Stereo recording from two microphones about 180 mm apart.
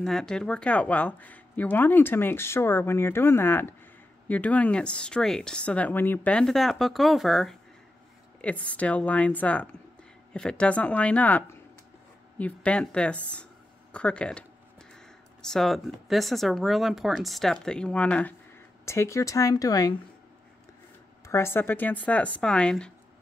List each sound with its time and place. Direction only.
0.0 s speech: 5° left (ahead or behind); by 20.0 s 20° left (ahead or behind)
21.3 s speech: 15° left (ahead or behind)